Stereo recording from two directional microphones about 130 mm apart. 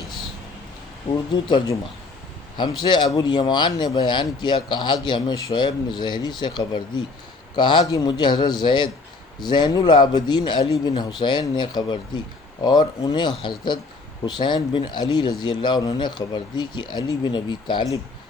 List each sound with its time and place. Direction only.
1.5 s speech: 35° left (ahead or behind)